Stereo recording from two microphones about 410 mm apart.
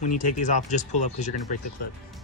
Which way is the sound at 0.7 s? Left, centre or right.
Centre.